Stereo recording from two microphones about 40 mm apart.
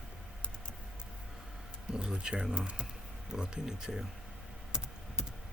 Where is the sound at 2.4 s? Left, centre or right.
Centre.